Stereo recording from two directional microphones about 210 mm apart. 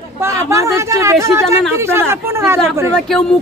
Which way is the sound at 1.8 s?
10° right (ahead or behind).